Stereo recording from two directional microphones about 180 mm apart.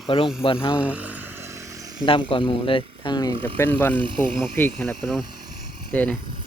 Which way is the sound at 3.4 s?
10° left (ahead or behind).